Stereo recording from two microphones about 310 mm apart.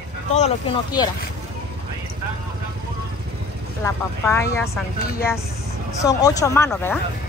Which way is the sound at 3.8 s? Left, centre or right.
Centre.